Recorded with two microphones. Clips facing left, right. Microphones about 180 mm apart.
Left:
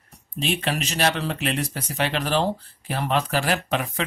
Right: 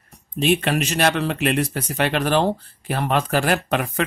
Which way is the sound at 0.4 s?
55° right (ahead or behind).